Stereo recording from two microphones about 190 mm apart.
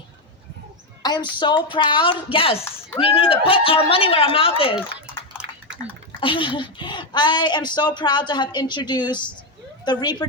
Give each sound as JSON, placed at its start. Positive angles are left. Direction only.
{"t": 1.0, "sound": "speech", "side_deg": 25}
{"t": 6.1, "sound": "speech", "side_deg": 25}